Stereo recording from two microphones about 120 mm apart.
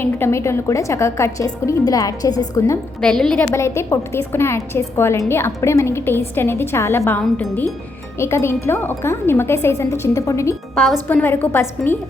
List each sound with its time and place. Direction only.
0.0 s a woman's voice: 20° left (ahead or behind)
3.0 s a woman's voice: 5° left (ahead or behind)
3.5 s a woman's voice: 25° left (ahead or behind)